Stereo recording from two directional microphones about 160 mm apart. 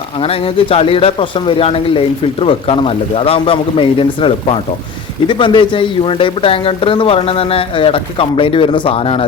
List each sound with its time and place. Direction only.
0.2 s speech: 35° left (ahead or behind)